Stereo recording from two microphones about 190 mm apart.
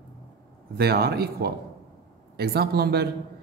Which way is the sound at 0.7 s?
55° right (ahead or behind).